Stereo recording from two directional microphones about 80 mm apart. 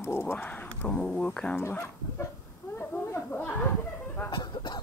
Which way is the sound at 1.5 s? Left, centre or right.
Left.